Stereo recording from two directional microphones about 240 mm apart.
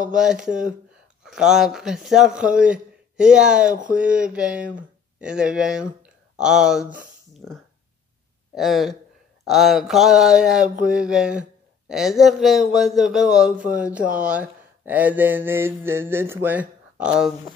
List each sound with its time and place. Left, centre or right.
0.1 s speech: centre